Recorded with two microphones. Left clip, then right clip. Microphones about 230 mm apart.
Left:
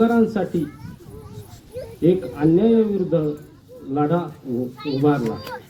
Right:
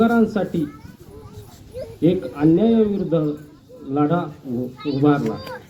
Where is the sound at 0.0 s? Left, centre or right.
Right.